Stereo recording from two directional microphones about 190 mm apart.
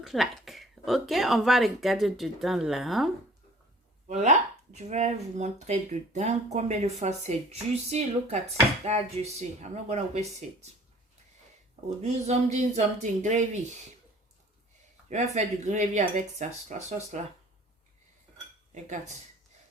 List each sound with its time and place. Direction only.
0.0 s speech: centre (ahead or behind)
4.0 s speech: 40° right (ahead or behind)
12.0 s speech: 35° right (ahead or behind)
15.1 s speech: 35° right (ahead or behind)
18.7 s speech: 40° right (ahead or behind)